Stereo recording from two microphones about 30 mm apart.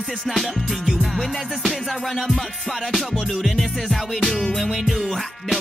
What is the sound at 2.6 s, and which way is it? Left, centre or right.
Music, centre.